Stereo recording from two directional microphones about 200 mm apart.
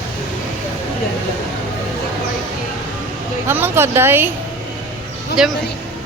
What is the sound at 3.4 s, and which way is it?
Speech, 10° right (ahead or behind).